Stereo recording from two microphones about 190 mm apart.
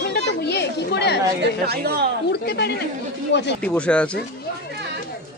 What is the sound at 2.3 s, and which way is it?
Speech, 60° left (ahead or behind).